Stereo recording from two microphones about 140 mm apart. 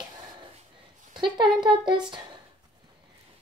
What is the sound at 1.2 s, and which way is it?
Speech, 35° right (ahead or behind).